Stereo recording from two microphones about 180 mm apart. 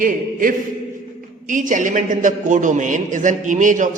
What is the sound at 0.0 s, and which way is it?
A man's voice, 50° right (ahead or behind).